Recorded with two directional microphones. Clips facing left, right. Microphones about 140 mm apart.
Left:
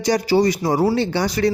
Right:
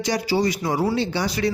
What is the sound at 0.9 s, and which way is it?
Speech, 50° left (ahead or behind).